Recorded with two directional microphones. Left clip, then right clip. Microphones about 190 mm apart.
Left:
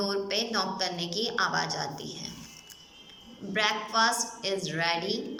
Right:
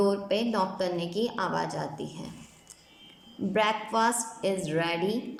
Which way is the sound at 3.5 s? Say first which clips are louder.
Even; 45° right (ahead or behind).